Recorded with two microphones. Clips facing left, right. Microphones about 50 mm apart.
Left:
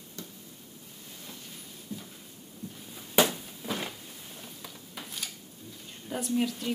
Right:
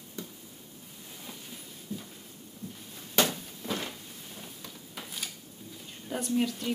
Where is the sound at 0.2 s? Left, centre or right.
Centre.